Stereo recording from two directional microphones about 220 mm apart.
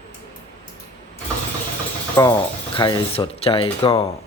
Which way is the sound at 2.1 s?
10° left (ahead or behind).